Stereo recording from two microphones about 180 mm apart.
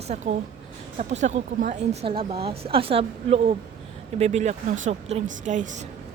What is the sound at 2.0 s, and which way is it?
A woman's voice, 30° right (ahead or behind).